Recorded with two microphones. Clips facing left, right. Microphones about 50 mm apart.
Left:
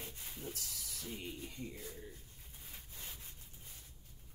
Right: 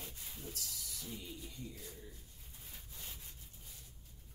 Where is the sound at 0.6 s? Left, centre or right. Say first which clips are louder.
Left 1 dB; left.